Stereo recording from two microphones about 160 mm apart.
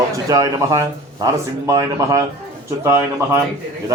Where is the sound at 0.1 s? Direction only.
20° right (ahead or behind).